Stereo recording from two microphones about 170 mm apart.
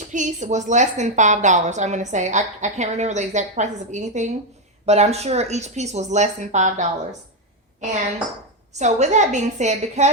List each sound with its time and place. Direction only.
0.1 s a woman's voice: 45° right (ahead or behind)
8.7 s a woman's voice: 45° right (ahead or behind)